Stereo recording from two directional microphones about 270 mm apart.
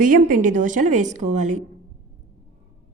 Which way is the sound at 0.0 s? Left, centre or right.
Right.